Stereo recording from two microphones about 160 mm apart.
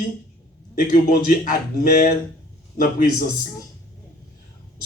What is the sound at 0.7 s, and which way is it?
Speech, 60° left (ahead or behind).